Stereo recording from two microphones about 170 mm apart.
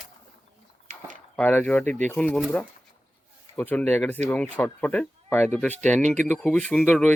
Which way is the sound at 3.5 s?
10° left (ahead or behind).